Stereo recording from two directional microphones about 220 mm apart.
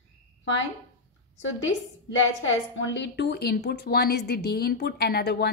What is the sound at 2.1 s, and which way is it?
A woman's voice, 60° left (ahead or behind).